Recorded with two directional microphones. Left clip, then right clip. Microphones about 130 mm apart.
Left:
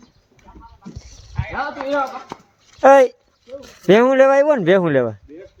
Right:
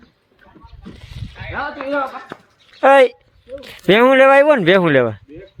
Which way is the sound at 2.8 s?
5° right (ahead or behind).